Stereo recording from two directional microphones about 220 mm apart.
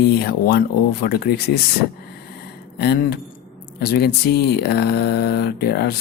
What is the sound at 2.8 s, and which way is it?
Speech, 45° left (ahead or behind).